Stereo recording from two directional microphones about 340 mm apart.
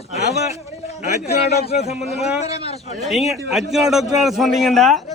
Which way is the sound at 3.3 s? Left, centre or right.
Centre.